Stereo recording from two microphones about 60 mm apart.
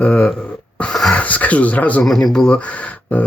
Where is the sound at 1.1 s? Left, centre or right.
Left.